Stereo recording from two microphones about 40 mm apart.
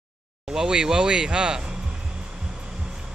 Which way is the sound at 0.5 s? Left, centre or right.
Centre.